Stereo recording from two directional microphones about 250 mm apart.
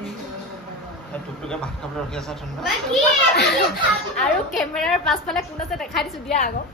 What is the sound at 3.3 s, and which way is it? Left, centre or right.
Speech, left.